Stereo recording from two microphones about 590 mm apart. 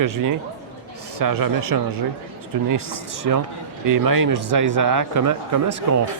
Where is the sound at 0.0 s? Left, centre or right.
Right.